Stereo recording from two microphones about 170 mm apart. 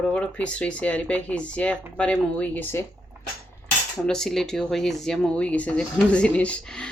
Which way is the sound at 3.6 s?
5° left (ahead or behind).